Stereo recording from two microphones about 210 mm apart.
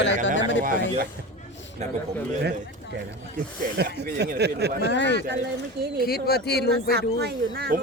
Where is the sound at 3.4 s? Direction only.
45° right (ahead or behind).